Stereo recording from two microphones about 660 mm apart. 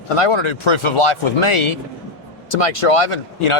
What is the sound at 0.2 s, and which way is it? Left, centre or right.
Speech, left.